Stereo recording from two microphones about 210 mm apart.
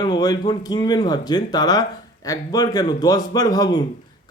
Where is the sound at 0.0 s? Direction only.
20° left (ahead or behind).